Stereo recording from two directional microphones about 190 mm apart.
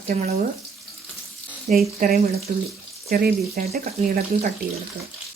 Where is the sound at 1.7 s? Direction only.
40° right (ahead or behind).